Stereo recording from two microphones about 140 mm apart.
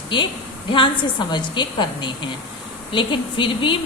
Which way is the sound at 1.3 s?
35° left (ahead or behind).